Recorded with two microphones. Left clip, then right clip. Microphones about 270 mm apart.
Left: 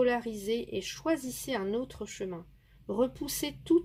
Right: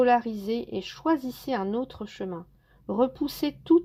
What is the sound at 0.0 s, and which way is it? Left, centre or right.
Speech, centre.